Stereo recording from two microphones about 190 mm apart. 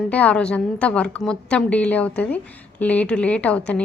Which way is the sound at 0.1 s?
5° left (ahead or behind).